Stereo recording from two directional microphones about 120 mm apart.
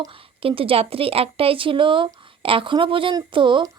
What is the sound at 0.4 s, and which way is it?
A woman's voice, 50° right (ahead or behind).